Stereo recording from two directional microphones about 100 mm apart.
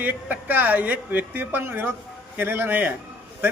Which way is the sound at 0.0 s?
15° right (ahead or behind).